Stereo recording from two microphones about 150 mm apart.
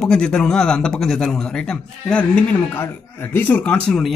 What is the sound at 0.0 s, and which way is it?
Speech, 5° left (ahead or behind).